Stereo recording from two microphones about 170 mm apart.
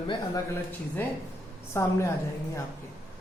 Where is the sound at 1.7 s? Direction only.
15° left (ahead or behind).